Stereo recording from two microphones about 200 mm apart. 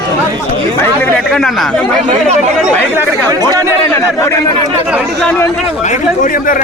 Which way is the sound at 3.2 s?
15° right (ahead or behind).